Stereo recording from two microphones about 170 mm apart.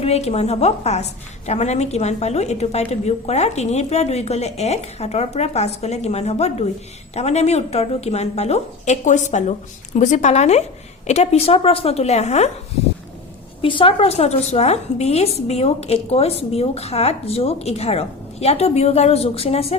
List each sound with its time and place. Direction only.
0.0 s a woman's voice: 40° left (ahead or behind)
13.6 s a woman's voice: 30° left (ahead or behind)